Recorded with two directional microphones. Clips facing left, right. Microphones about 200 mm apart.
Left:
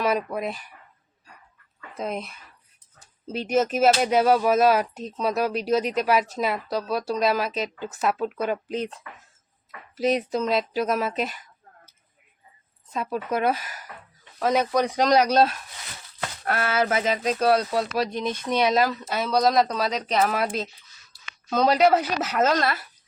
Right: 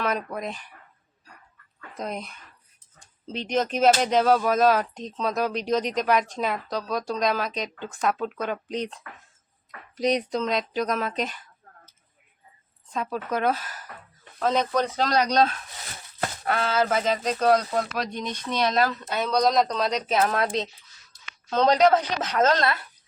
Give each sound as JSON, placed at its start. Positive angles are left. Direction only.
{"t": 0.0, "sound": "speech", "side_deg": 10}
{"t": 2.0, "sound": "speech", "side_deg": 0}
{"t": 10.0, "sound": "speech", "side_deg": 5}
{"t": 12.9, "sound": "speech", "side_deg": 10}